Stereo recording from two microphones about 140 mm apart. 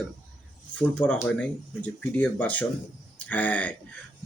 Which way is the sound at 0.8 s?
10° left (ahead or behind).